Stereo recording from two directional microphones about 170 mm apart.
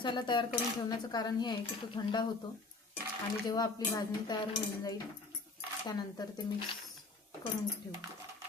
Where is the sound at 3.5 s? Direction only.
20° left (ahead or behind).